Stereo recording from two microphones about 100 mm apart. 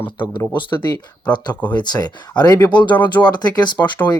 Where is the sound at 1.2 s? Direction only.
45° left (ahead or behind).